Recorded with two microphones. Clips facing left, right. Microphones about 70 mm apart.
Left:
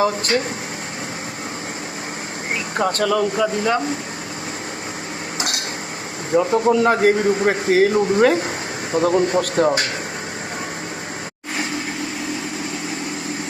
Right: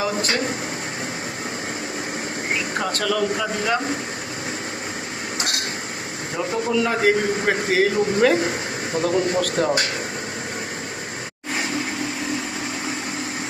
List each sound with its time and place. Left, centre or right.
0.0 s a man's voice: left
2.7 s speech: left
6.5 s a man's voice: left